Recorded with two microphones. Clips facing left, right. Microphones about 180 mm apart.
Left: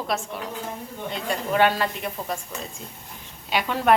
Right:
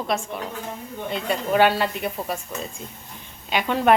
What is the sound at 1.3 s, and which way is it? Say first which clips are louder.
A woman's voice: right 2 dB; 5° right (ahead or behind).